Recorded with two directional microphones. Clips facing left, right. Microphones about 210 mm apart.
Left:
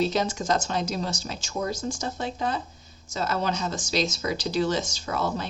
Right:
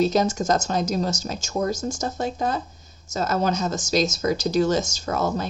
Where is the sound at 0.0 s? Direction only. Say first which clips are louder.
Right 5 dB; 45° right (ahead or behind).